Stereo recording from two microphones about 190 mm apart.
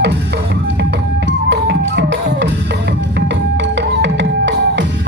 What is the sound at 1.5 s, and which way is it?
Music, 70° right (ahead or behind).